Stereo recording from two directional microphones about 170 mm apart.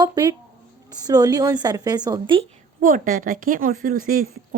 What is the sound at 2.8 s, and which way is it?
Speech, 50° right (ahead or behind).